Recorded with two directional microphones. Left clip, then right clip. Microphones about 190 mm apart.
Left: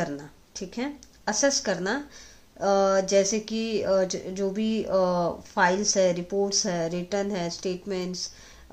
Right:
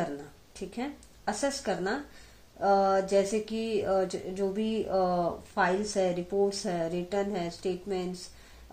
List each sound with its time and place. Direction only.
0.6 s speech: 20° left (ahead or behind)